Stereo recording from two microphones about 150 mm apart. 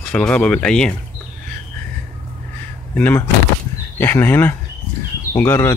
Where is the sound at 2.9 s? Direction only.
10° left (ahead or behind).